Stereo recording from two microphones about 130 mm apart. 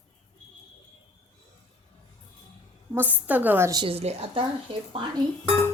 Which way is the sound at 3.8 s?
50° right (ahead or behind).